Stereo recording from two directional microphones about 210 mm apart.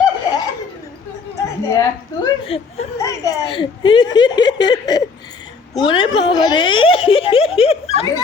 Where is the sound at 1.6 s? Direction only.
15° left (ahead or behind).